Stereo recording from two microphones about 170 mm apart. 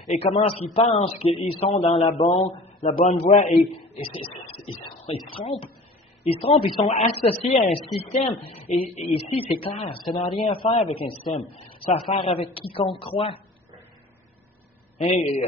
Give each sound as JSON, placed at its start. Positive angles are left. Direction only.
{"t": 0.1, "sound": "a man's voice", "side_deg": 35}